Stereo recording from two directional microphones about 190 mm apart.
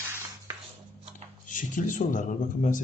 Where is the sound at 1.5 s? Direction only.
45° left (ahead or behind).